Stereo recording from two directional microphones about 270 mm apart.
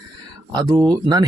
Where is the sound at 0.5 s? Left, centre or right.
Centre.